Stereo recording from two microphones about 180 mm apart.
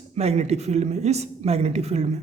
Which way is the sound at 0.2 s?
35° right (ahead or behind).